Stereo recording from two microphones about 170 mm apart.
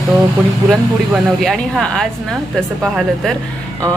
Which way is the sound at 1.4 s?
Centre (ahead or behind).